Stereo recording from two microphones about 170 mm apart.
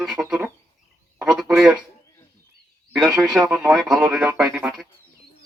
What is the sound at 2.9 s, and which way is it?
Speech, 5° right (ahead or behind).